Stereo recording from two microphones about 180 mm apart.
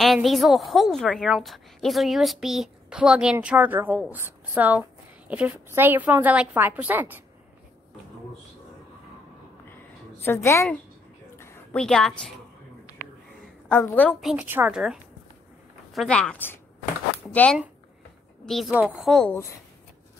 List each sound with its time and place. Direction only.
0.0 s a woman's voice: centre (ahead or behind)
10.2 s a woman's voice: 15° left (ahead or behind)
11.3 s a sound: 15° left (ahead or behind)
11.8 s a woman's voice: 5° left (ahead or behind)
13.7 s a woman's voice: 10° left (ahead or behind)
14.2 s a woman's voice: 10° right (ahead or behind)